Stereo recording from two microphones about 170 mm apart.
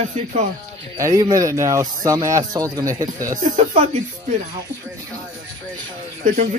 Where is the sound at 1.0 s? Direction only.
20° right (ahead or behind).